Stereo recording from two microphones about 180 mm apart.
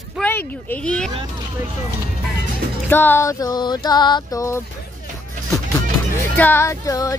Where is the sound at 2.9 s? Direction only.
10° left (ahead or behind).